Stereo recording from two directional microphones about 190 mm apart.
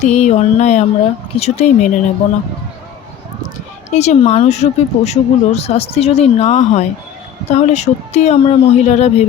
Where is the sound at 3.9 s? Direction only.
35° left (ahead or behind).